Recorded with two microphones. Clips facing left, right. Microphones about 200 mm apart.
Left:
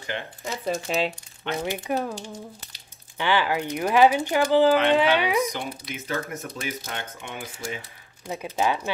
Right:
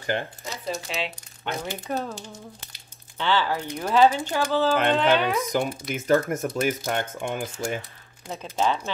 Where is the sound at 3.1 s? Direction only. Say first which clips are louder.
Left 1 dB; 15° left (ahead or behind).